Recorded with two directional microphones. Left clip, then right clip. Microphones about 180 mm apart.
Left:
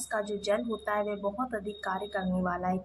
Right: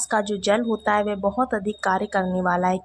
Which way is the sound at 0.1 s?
35° right (ahead or behind).